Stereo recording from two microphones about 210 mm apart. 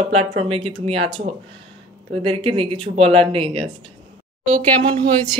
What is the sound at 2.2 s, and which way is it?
Speech, 25° right (ahead or behind).